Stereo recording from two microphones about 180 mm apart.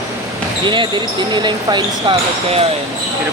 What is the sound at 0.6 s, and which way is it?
Speech, 25° right (ahead or behind).